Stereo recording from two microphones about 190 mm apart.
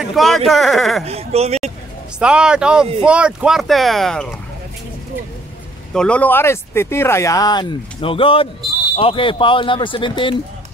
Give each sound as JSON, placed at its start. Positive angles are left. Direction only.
{"t": 0.0, "sound": "speech", "side_deg": 0}
{"t": 1.0, "sound": "speech", "side_deg": -30}
{"t": 2.1, "sound": "speech", "side_deg": -5}
{"t": 5.9, "sound": "speech", "side_deg": 5}